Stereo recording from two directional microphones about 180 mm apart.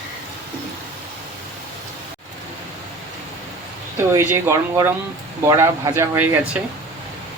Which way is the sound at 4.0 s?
15° right (ahead or behind).